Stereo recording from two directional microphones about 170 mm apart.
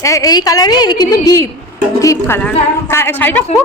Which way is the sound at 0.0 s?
20° left (ahead or behind).